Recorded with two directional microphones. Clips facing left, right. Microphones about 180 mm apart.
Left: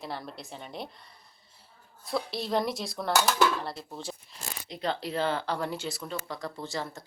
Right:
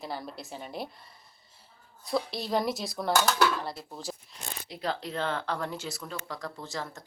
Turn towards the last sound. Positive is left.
turn(degrees=0)  # may be behind; listen again after turning